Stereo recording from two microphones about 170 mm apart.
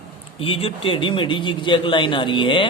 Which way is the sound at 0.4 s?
35° left (ahead or behind).